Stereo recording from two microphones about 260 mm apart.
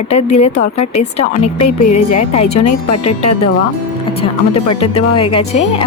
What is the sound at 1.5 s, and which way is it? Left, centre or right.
Speech, left.